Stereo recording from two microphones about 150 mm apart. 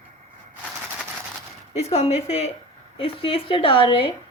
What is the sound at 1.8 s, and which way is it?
Speech, 45° left (ahead or behind).